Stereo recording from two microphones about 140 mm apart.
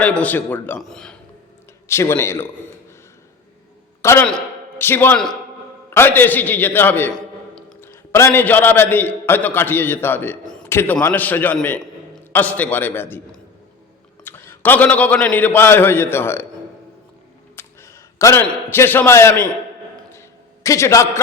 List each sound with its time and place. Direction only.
0.0 s a man's voice: 10° left (ahead or behind)
1.9 s speech: 20° left (ahead or behind)
4.0 s a man's voice: 20° left (ahead or behind)
7.8 s a man's voice: 20° left (ahead or behind)
11.6 s a sound: 10° left (ahead or behind)
12.3 s a man's voice: 10° left (ahead or behind)
17.6 s a sound: 20° left (ahead or behind)
18.4 s a man's voice: 15° left (ahead or behind)
20.7 s speech: 20° left (ahead or behind)